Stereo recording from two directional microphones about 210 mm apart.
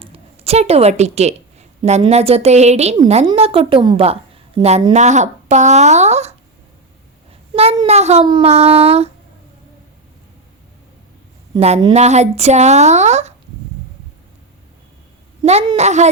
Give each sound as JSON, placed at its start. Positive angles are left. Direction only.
{"t": 0.0, "sound": "a woman's voice", "side_deg": -30}
{"t": 7.5, "sound": "speech", "side_deg": -30}
{"t": 11.6, "sound": "speech", "side_deg": -25}
{"t": 15.4, "sound": "speech", "side_deg": -30}